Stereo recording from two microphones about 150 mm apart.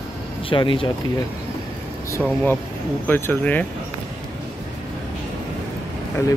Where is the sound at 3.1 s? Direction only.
10° left (ahead or behind).